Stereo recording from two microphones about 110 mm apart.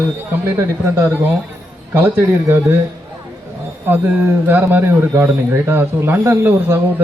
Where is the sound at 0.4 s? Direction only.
25° right (ahead or behind).